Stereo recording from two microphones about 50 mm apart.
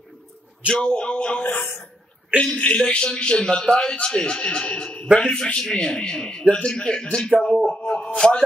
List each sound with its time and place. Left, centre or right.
0.7 s a man's voice: centre
1.4 s a man's voice: left